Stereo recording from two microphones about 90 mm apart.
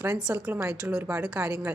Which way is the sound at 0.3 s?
15° right (ahead or behind).